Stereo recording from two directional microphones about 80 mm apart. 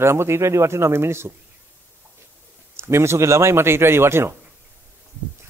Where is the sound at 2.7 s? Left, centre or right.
Right.